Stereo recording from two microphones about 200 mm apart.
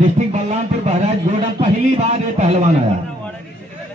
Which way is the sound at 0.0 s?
35° right (ahead or behind).